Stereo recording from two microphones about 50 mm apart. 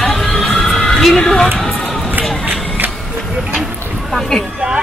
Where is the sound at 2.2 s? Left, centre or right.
Right.